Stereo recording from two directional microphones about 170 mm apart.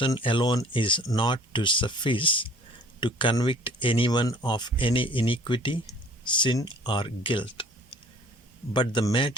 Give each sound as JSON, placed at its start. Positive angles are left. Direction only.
{"t": 0.0, "sound": "speech", "side_deg": 30}